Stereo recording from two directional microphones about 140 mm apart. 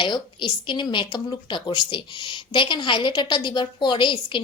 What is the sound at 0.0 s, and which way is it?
A woman's voice, 35° left (ahead or behind).